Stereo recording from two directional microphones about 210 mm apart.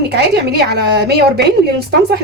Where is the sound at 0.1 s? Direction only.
50° right (ahead or behind).